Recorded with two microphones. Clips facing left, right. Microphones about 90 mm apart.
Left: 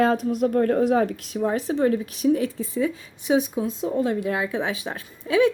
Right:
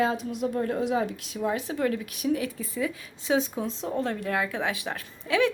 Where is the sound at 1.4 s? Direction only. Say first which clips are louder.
Left 5 dB; 35° left (ahead or behind).